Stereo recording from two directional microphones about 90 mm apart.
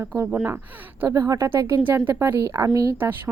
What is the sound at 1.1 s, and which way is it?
A woman's voice, 40° right (ahead or behind).